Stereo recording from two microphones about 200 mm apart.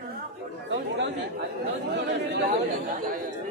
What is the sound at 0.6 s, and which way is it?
Chatter, 65° right (ahead or behind).